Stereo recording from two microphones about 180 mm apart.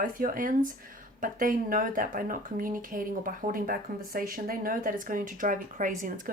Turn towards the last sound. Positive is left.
turn(degrees=-45)  # may be behind; listen again after turning